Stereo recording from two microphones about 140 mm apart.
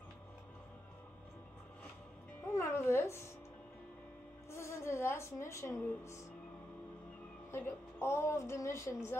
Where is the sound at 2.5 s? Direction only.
20° left (ahead or behind).